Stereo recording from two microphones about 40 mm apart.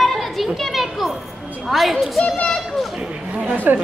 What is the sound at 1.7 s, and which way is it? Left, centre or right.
Speech, centre.